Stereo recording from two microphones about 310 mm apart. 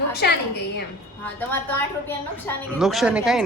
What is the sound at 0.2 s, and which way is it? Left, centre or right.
Speech, left.